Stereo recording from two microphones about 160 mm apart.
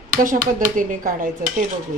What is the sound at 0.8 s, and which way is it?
Speech, 55° right (ahead or behind).